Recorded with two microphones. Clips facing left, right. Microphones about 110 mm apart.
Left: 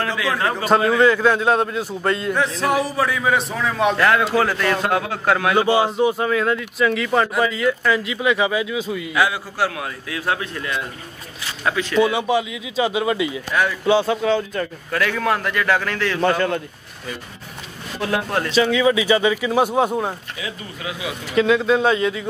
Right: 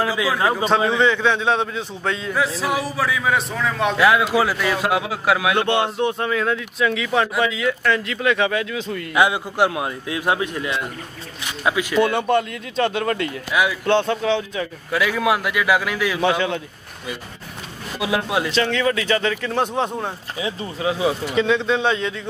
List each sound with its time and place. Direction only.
0.0 s speech: 10° right (ahead or behind)
0.7 s a man's voice: 5° left (ahead or behind)
9.1 s a man's voice: 20° right (ahead or behind)
12.0 s a man's voice: centre (ahead or behind)
17.9 s speech: 10° right (ahead or behind)
18.5 s speech: 5° left (ahead or behind)
20.3 s speech: 30° right (ahead or behind)
21.4 s a man's voice: 5° left (ahead or behind)